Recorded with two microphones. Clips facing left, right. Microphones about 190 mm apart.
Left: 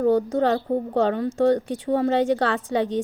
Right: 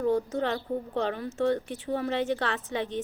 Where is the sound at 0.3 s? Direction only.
35° left (ahead or behind).